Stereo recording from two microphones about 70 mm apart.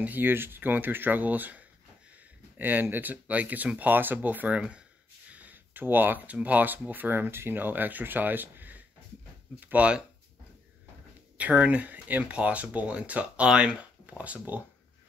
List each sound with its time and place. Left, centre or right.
0.0 s speech: right
5.3 s a sound: right
6.3 s speech: right
11.3 s speech: right